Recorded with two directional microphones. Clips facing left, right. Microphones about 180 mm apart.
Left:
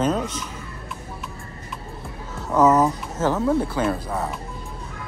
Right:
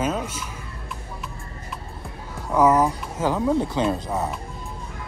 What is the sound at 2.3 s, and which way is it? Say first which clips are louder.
Speech: left 1 dB; 10° right (ahead or behind).